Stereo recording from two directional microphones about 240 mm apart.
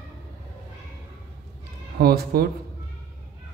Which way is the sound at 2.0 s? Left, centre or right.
Right.